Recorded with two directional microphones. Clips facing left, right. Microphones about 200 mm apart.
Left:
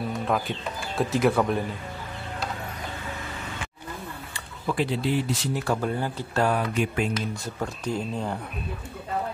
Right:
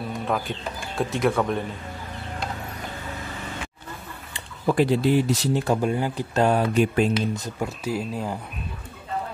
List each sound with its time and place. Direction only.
0.3 s speech: centre (ahead or behind)
4.6 s speech: 45° right (ahead or behind)
5.5 s speech: 20° right (ahead or behind)
7.6 s speech: 5° right (ahead or behind)